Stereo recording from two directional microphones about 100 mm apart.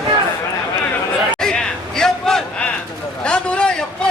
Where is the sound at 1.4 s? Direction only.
5° left (ahead or behind).